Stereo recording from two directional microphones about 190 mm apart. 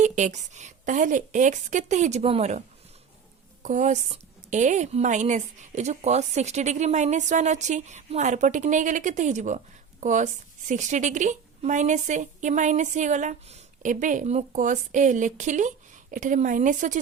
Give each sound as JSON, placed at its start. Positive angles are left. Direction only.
{"t": 0.0, "sound": "a woman's voice", "side_deg": -40}